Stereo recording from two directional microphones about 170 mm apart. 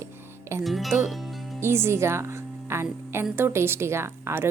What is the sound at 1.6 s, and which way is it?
A woman's voice, 15° right (ahead or behind).